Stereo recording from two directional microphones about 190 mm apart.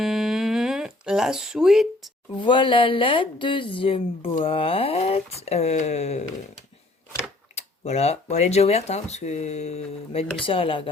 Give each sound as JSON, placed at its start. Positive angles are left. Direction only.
{"t": 0.0, "sound": "a sound", "side_deg": 0}
{"t": 2.4, "sound": "speech", "side_deg": 25}
{"t": 7.5, "sound": "speech", "side_deg": 35}